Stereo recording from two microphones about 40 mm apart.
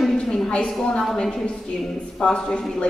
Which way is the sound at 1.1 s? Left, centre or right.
Centre.